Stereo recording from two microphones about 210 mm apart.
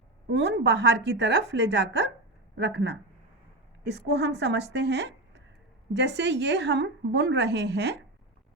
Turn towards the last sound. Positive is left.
turn(degrees=-55)  # may be behind; listen again after turning